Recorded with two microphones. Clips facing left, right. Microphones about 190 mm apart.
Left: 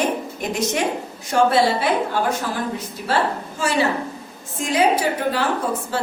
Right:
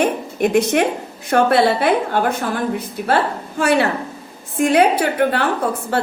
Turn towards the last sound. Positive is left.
turn(degrees=-60)  # may be behind; listen again after turning